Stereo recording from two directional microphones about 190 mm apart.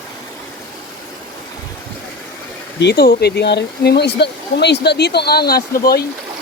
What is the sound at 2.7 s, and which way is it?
Speech, 60° left (ahead or behind).